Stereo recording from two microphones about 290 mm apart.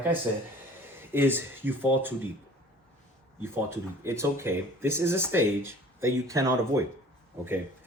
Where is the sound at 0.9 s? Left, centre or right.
Centre.